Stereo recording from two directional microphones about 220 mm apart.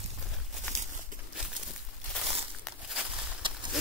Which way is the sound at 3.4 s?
20° right (ahead or behind).